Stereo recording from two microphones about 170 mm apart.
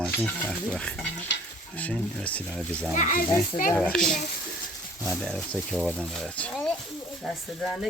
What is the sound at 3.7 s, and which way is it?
Speech, centre (ahead or behind).